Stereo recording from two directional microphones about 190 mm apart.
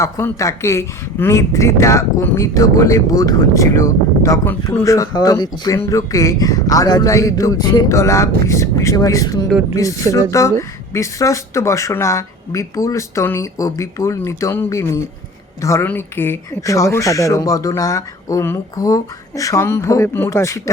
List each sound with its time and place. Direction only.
0.0 s speech: 15° left (ahead or behind)